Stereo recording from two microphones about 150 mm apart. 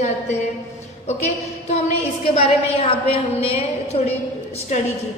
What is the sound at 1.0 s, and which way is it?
A woman's voice, 45° left (ahead or behind).